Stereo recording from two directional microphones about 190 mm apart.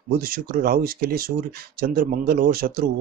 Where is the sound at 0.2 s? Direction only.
50° right (ahead or behind).